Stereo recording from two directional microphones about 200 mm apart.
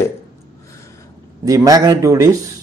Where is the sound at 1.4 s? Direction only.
15° right (ahead or behind).